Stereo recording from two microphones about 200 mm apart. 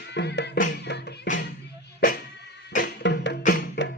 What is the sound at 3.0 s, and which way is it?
Music, 60° left (ahead or behind).